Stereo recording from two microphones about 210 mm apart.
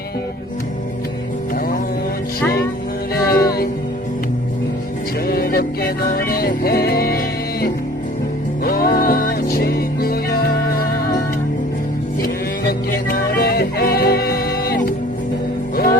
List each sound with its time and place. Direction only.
3.2 s music: 45° left (ahead or behind)
5.2 s music: 45° left (ahead or behind)
12.2 s music: 45° left (ahead or behind)